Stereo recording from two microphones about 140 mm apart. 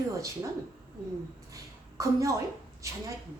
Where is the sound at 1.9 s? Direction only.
25° right (ahead or behind).